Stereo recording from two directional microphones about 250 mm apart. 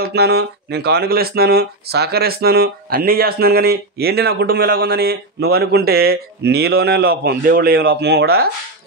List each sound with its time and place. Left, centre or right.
0.0 s speech: right